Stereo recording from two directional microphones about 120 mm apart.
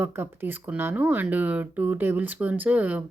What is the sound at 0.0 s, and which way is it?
Speech, 20° right (ahead or behind).